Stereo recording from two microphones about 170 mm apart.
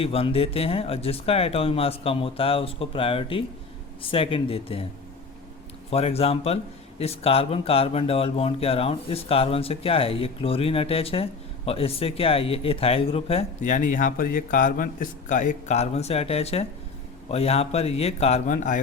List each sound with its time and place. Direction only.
0.0 s speech: 35° left (ahead or behind)
5.9 s speech: 35° left (ahead or behind)
13.7 s speech: 50° left (ahead or behind)